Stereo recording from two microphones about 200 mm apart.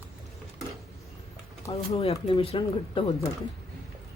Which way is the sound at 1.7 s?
30° left (ahead or behind).